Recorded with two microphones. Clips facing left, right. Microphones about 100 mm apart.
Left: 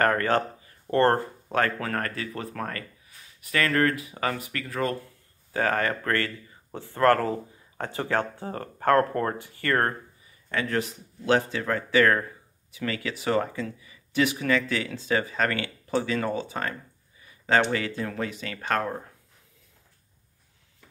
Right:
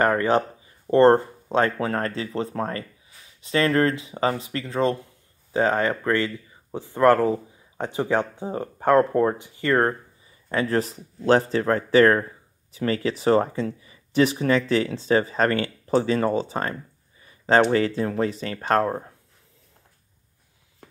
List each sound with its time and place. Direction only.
0.0 s speech: 15° right (ahead or behind)
10.5 s speech: 35° right (ahead or behind)